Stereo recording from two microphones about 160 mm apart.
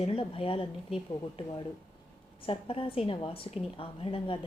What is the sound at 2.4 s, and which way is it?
A woman's voice, 35° left (ahead or behind).